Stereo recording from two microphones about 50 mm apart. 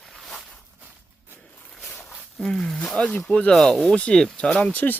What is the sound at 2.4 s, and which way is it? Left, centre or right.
Speech, centre.